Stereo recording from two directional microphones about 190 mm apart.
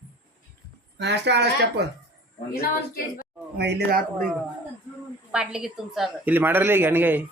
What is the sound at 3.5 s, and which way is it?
Speech, 55° right (ahead or behind).